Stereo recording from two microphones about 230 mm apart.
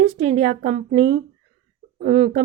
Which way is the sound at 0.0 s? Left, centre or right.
Right.